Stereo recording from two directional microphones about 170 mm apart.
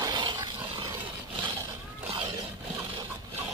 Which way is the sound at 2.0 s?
35° right (ahead or behind).